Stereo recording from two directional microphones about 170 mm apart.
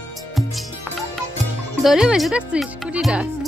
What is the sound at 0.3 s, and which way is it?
Music, centre (ahead or behind).